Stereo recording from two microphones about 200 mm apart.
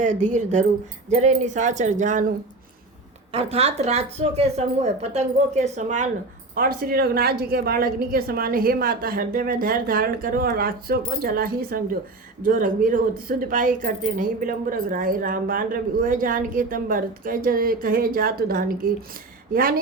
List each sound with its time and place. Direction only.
0.0 s speech: 40° right (ahead or behind)
3.3 s speech: 30° right (ahead or behind)
6.5 s speech: 45° right (ahead or behind)